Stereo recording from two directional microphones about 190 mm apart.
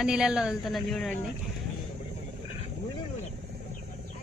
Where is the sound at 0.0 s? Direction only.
5° right (ahead or behind).